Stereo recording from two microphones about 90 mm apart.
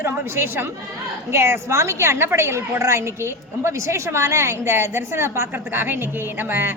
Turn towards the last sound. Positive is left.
turn(degrees=-25)  # may be behind; listen again after turning